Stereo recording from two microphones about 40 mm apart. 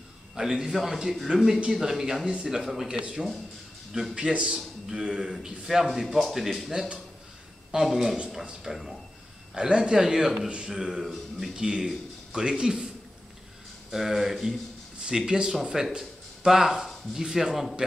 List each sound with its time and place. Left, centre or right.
0.4 s a man's voice: centre
4.1 s a man's voice: right
5.9 s speech: centre
7.7 s a man's voice: centre
9.6 s a man's voice: centre
11.5 s a man's voice: centre
15.0 s a man's voice: centre
16.0 s a sound: centre
17.2 s a man's voice: centre